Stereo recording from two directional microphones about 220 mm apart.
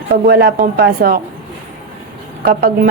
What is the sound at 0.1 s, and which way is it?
A woman's voice, 45° right (ahead or behind).